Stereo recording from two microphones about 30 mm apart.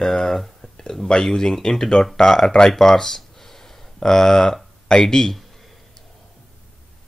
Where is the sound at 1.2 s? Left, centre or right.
Centre.